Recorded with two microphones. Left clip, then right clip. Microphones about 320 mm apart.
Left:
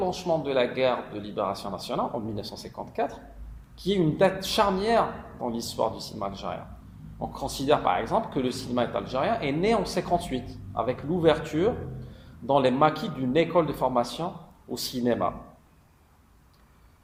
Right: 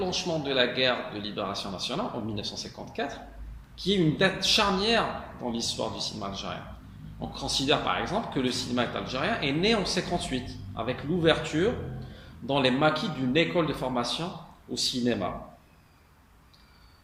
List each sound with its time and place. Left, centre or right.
0.0 s speech: centre